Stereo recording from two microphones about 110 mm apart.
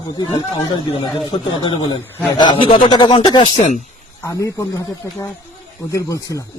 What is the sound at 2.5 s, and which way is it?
Speech, 55° left (ahead or behind).